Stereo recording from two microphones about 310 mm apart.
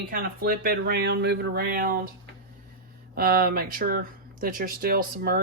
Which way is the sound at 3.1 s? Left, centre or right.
Right.